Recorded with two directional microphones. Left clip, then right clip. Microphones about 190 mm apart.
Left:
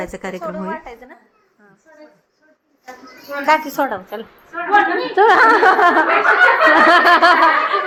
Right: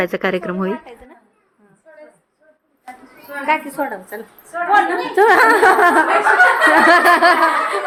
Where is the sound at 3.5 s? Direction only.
5° left (ahead or behind).